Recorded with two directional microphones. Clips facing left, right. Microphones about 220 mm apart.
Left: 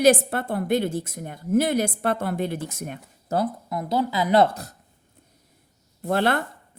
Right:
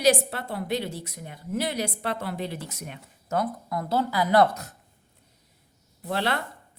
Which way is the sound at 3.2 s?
30° left (ahead or behind).